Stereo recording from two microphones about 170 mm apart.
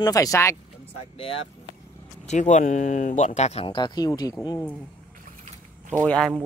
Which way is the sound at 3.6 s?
25° left (ahead or behind).